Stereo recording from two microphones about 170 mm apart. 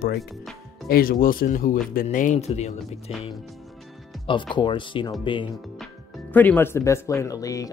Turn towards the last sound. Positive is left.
turn(degrees=20)  # may be behind; listen again after turning